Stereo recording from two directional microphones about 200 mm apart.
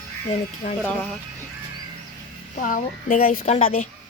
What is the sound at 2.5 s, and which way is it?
Speech, 40° left (ahead or behind).